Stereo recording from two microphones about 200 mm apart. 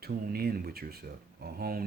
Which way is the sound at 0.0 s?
50° right (ahead or behind).